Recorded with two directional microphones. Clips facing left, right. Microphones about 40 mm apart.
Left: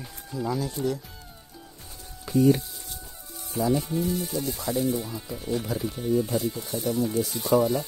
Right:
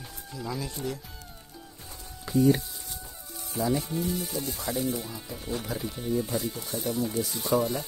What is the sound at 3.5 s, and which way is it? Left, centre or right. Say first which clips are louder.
Speech: left 3 dB; centre.